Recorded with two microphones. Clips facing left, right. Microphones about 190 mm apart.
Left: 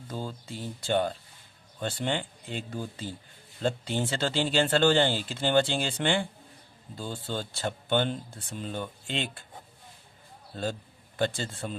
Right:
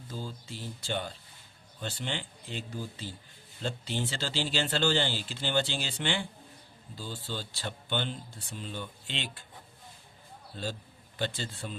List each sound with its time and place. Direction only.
0.1 s speech: 55° left (ahead or behind)
11.2 s speech: 45° left (ahead or behind)